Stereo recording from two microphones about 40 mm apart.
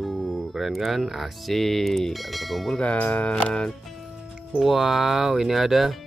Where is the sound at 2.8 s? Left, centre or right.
Left.